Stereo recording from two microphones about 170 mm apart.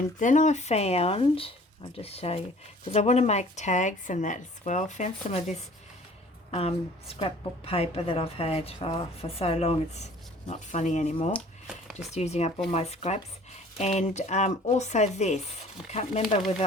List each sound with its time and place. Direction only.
0.2 s a woman's voice: 45° left (ahead or behind)